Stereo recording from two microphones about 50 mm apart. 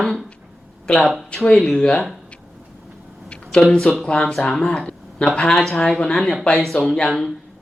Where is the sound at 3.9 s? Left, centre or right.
Left.